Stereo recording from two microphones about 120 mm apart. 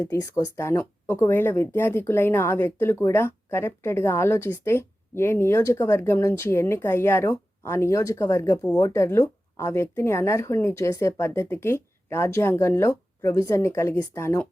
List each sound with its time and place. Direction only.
0.0 s speech: 30° left (ahead or behind)